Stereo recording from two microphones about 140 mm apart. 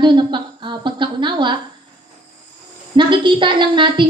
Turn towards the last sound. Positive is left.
turn(degrees=-35)  # may be behind; listen again after turning